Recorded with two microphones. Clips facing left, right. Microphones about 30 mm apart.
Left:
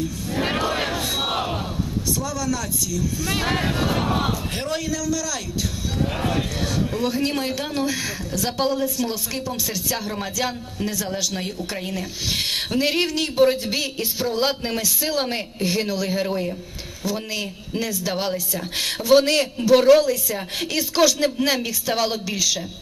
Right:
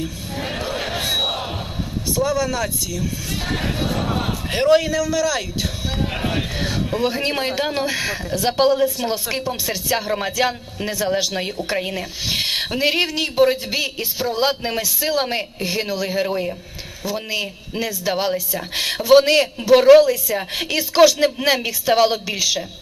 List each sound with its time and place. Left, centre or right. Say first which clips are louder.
0.9 s a sound: right 3 dB; right
2.1 s a man's voice: right 10 dB; right
3.3 s speech: left 3 dB; left
3.5 s speech: left 1 dB; centre
4.5 s a man's voice: right 10 dB; right